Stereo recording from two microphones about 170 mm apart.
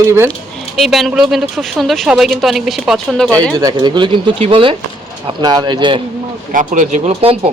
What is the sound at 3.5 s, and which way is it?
Speech, 25° right (ahead or behind).